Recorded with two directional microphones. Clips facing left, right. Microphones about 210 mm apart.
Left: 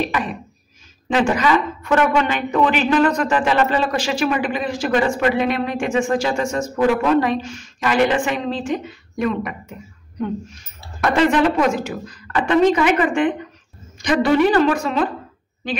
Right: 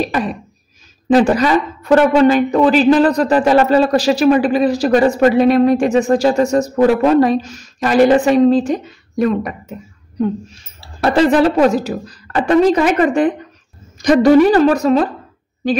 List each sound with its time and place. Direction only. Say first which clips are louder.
0.0 s a woman's voice: right 4 dB; 35° right (ahead or behind)